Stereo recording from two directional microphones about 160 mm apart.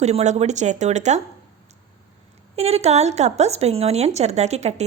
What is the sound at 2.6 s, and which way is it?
Speech, 40° right (ahead or behind).